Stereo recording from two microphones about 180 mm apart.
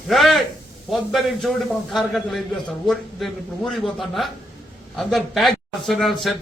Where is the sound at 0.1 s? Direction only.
Centre (ahead or behind).